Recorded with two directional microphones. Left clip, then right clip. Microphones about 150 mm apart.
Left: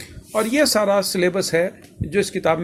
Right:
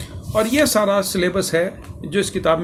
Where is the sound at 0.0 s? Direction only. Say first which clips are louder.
Right 2 dB; 40° left (ahead or behind).